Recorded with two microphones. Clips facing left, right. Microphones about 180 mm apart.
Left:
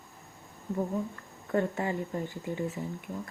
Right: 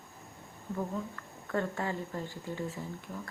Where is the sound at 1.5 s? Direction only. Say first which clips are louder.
Left 4 dB; 20° left (ahead or behind).